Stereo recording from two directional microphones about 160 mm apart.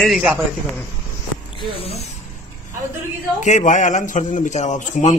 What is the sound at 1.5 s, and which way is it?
Speech, 40° left (ahead or behind).